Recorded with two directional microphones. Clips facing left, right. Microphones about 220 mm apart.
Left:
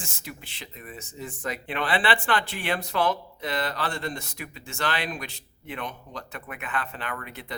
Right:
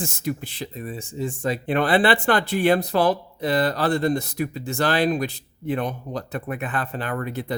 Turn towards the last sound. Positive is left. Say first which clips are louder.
# right 9 dB
turn(degrees=-40)  # may be behind; listen again after turning